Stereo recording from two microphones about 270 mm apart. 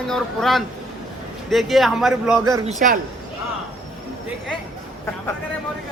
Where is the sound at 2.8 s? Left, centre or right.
Right.